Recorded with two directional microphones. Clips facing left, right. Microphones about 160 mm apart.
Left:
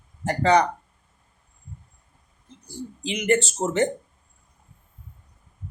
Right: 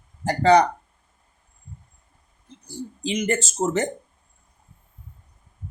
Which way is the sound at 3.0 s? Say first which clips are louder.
Left 2 dB; 40° right (ahead or behind).